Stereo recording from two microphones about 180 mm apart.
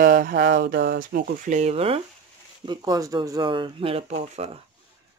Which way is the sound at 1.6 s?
35° right (ahead or behind).